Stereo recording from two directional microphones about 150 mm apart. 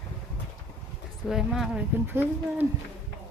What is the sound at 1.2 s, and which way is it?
Speech, 5° right (ahead or behind).